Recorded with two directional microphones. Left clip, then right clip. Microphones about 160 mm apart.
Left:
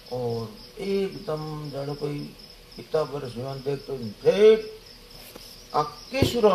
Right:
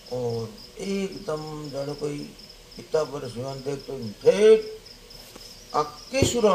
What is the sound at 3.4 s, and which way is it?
Speech, 50° right (ahead or behind).